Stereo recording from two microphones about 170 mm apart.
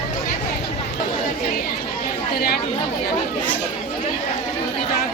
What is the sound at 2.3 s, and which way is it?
Chatter, 65° left (ahead or behind).